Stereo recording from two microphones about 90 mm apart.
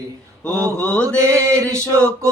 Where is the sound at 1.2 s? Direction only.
35° right (ahead or behind).